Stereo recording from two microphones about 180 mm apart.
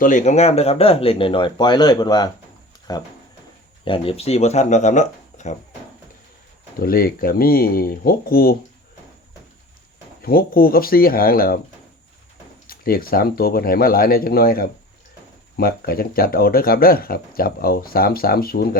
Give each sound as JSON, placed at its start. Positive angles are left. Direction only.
{"t": 0.0, "sound": "speech", "side_deg": 45}
{"t": 6.7, "sound": "speech", "side_deg": 55}
{"t": 10.2, "sound": "speech", "side_deg": 55}
{"t": 12.6, "sound": "speech", "side_deg": 55}